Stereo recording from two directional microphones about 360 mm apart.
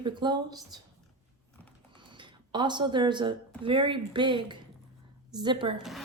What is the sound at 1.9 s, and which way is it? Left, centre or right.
A woman's voice, centre.